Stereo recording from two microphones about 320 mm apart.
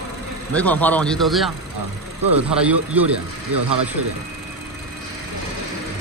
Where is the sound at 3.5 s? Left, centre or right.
Right.